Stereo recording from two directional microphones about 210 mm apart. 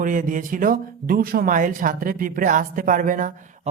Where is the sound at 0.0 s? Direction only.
40° right (ahead or behind).